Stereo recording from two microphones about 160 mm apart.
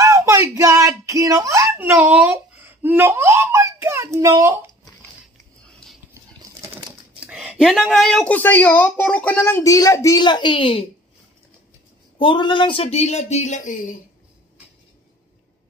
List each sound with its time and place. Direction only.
0.0 s a sound: 20° right (ahead or behind)
7.2 s speech: 5° right (ahead or behind); by 10.9 s 35° left (ahead or behind)
12.2 s speech: 30° left (ahead or behind); by 13.8 s 50° left (ahead or behind)